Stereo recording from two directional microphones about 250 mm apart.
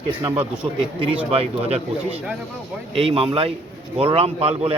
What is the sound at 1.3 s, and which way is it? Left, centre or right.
A man's voice, right.